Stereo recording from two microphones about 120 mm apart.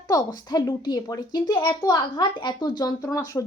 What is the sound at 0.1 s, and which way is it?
Speech, 30° left (ahead or behind).